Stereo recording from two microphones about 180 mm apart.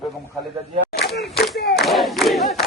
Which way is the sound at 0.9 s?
65° left (ahead or behind).